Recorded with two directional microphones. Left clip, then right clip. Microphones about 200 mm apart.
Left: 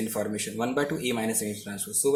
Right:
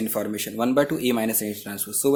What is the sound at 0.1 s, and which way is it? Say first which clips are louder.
Speech: right 3 dB; 50° right (ahead or behind).